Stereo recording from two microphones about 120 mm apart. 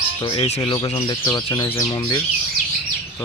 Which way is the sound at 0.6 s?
40° left (ahead or behind).